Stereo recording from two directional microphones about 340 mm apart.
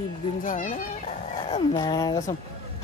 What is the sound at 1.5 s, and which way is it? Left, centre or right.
Speech, centre.